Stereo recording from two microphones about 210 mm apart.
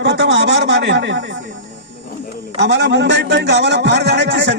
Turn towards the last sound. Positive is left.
turn(degrees=-55)  # may be behind; listen again after turning